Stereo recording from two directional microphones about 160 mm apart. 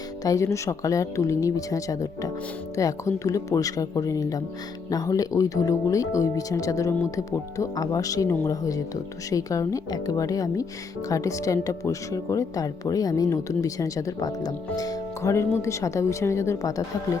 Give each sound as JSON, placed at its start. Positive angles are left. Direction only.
{"t": 0.3, "sound": "speech", "side_deg": 20}